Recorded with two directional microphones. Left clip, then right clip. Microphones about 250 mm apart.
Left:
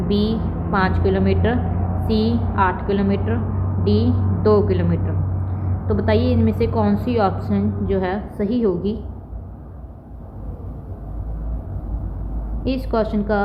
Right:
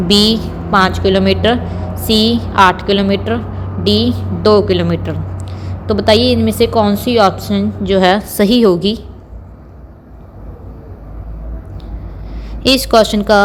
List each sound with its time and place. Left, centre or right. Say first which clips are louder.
0.1 s a woman's voice: right 12 dB; right
12.6 s a woman's voice: right 12 dB; right